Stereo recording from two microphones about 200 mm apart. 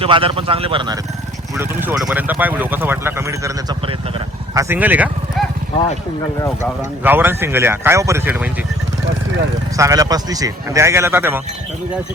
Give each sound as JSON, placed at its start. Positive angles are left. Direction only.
{"t": 0.0, "sound": "speech", "side_deg": -25}
{"t": 1.5, "sound": "speech", "side_deg": -10}
{"t": 7.0, "sound": "speech", "side_deg": -10}
{"t": 9.7, "sound": "speech", "side_deg": -15}